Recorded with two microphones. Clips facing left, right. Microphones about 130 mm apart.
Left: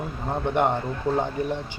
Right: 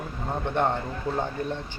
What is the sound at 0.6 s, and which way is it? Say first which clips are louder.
Speech: left 2 dB; 15° left (ahead or behind).